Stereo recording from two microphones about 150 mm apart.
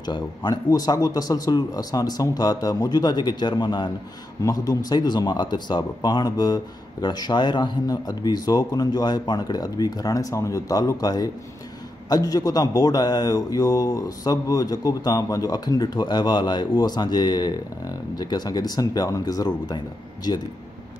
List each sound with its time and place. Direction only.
0.0 s speech: 30° left (ahead or behind)